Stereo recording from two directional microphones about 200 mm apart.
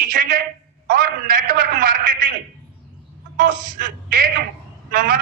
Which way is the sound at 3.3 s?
45° right (ahead or behind).